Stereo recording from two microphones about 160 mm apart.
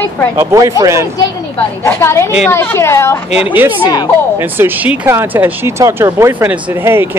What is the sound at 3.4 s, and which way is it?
Speech, 10° right (ahead or behind).